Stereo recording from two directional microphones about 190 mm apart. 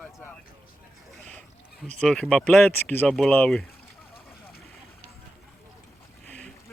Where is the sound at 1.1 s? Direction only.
5° left (ahead or behind).